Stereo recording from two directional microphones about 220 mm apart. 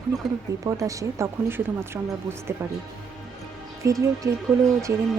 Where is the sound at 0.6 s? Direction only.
15° right (ahead or behind).